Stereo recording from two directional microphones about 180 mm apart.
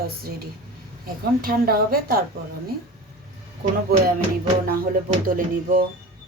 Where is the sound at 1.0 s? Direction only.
55° right (ahead or behind).